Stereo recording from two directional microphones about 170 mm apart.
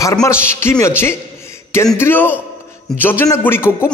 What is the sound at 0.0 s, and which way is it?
A man's voice, 20° left (ahead or behind).